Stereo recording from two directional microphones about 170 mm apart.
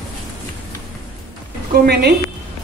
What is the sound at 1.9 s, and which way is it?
Speech, 75° right (ahead or behind).